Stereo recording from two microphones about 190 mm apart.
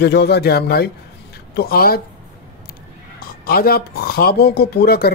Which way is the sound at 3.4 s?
50° left (ahead or behind).